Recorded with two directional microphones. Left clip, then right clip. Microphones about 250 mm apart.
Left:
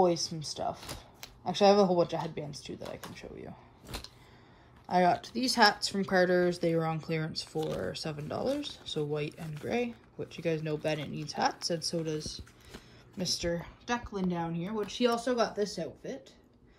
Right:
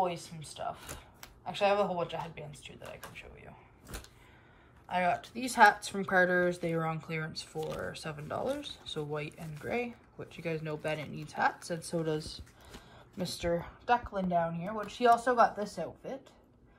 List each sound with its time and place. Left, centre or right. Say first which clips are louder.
1.5 s speech: left 5 dB; centre
4.8 s speech: left 4 dB; centre
7.6 s speech: left 2 dB; centre
7.9 s speech: left 2 dB; centre
11.9 s speech: right 1 dB; centre